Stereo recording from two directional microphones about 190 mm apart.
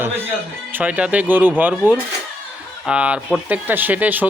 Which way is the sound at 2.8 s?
5° right (ahead or behind).